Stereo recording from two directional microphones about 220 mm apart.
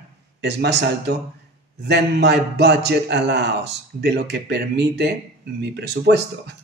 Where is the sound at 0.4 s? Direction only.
50° right (ahead or behind).